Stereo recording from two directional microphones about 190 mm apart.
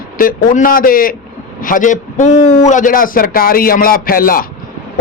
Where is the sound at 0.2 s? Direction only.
45° left (ahead or behind).